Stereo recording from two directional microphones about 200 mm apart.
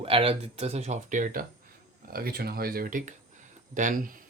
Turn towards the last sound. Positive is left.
turn(degrees=-45)  # may be behind; listen again after turning